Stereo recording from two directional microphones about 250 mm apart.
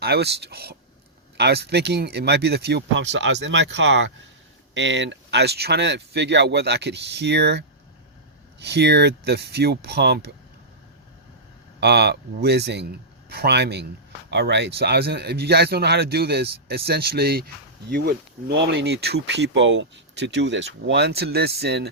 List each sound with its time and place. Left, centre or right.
0.0 s speech: right
11.8 s speech: right